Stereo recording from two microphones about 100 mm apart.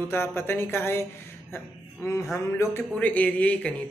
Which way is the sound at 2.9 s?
15° left (ahead or behind).